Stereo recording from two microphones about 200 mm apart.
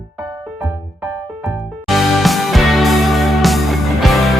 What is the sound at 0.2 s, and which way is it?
Music, 20° right (ahead or behind).